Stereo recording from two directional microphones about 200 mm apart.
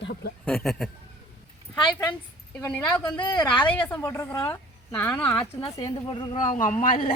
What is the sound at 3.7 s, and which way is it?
Speech, 10° left (ahead or behind).